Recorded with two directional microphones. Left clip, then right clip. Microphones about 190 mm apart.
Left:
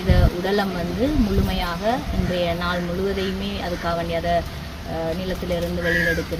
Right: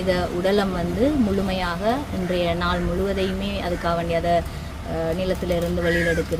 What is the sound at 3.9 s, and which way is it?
Speech, 15° right (ahead or behind).